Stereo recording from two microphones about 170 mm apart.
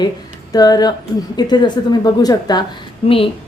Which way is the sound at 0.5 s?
20° left (ahead or behind).